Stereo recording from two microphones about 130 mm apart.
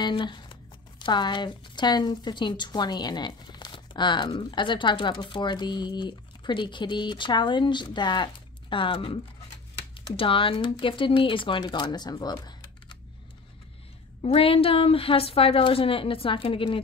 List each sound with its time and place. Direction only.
0.0 s speech: 35° left (ahead or behind)
14.2 s a woman's voice: 45° left (ahead or behind)